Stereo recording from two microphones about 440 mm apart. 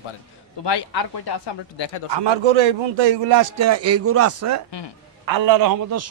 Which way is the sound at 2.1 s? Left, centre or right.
Right.